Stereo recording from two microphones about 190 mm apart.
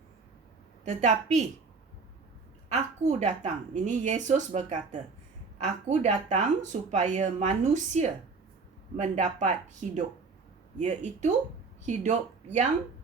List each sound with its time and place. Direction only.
0.9 s speech: 35° right (ahead or behind)
2.7 s speech: 35° right (ahead or behind)